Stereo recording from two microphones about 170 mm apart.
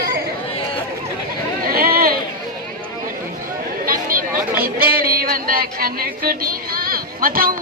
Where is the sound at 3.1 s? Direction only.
55° right (ahead or behind).